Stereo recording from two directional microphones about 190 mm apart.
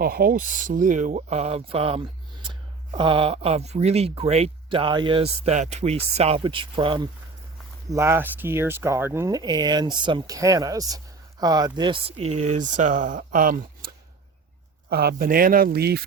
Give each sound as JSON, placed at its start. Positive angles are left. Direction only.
{"t": 0.0, "sound": "speech", "side_deg": -50}
{"t": 7.9, "sound": "speech", "side_deg": -15}